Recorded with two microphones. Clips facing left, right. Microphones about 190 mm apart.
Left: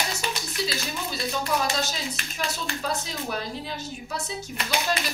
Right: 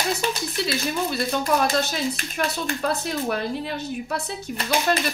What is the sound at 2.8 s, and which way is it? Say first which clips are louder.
A woman's voice: right 6 dB; 60° right (ahead or behind).